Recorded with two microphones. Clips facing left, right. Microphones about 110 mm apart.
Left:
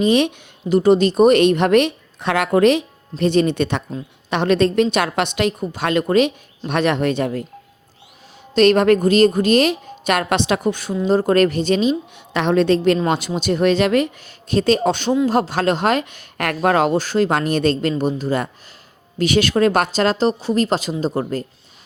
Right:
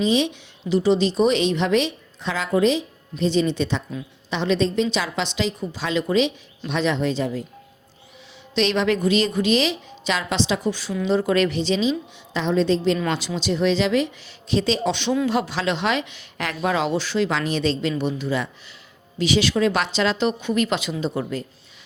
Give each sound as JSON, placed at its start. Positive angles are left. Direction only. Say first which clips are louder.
{"t": 0.0, "sound": "speech", "louder": "left 4 dB", "side_deg": 55}
{"t": 8.5, "sound": "speech", "louder": "left 8 dB", "side_deg": 50}